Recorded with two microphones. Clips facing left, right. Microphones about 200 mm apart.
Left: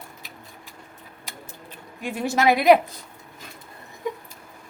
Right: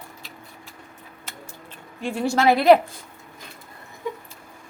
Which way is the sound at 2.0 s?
15° left (ahead or behind).